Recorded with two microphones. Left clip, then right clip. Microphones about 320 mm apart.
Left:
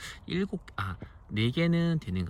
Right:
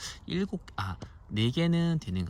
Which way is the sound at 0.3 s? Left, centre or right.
Centre.